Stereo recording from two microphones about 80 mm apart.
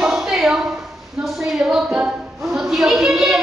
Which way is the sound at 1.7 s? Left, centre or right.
Centre.